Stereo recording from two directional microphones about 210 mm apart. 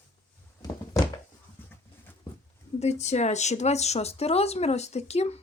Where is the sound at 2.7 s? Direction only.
30° left (ahead or behind).